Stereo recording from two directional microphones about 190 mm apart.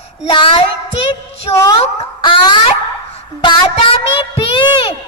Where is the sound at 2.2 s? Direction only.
25° left (ahead or behind).